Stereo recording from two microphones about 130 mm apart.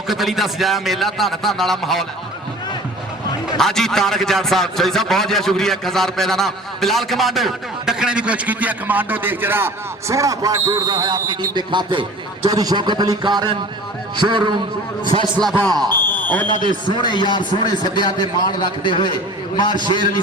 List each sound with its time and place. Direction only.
0.1 s a man's voice: centre (ahead or behind)
3.6 s a man's voice: 5° left (ahead or behind); by 16.0 s 30° right (ahead or behind)
16.2 s speech: 10° left (ahead or behind)
16.9 s a man's voice: 35° left (ahead or behind)